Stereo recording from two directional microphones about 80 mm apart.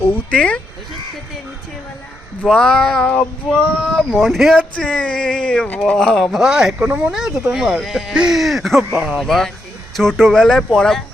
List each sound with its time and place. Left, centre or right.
0.1 s speech: centre
2.4 s speech: centre
3.8 s speech: centre
4.7 s speech: centre
6.4 s speech: centre
7.1 s speech: centre